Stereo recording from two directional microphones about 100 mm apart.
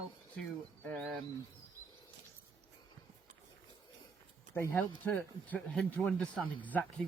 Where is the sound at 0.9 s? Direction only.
10° left (ahead or behind).